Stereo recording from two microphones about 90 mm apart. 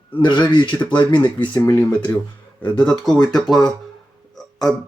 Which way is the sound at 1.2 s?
15° left (ahead or behind).